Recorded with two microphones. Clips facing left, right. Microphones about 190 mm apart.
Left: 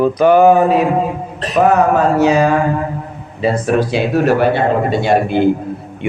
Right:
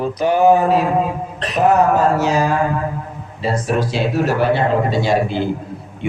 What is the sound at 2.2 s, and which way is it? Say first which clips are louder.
Speech: left 5 dB; 65° left (ahead or behind).